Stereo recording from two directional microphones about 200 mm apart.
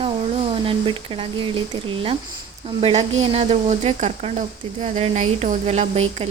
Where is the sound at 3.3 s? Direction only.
30° right (ahead or behind).